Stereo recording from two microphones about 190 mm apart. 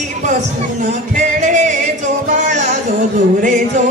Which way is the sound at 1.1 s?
40° right (ahead or behind).